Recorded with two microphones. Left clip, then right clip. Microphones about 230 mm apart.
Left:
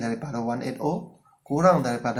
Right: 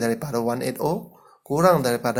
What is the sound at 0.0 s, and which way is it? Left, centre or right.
Speech, right.